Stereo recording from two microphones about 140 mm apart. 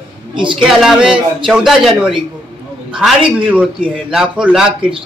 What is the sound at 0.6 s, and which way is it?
A man's voice, 5° right (ahead or behind).